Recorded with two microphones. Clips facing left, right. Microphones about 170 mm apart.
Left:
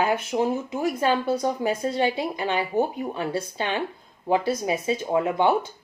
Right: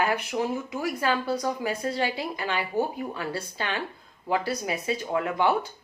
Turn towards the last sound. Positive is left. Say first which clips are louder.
# left 3 dB
turn(degrees=20)  # may be behind; listen again after turning